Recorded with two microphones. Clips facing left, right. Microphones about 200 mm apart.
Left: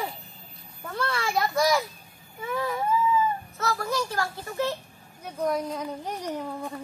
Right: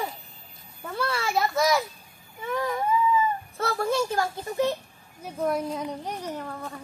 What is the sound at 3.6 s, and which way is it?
Speech, 30° right (ahead or behind).